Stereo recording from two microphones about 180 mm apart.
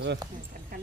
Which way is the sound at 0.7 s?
55° right (ahead or behind).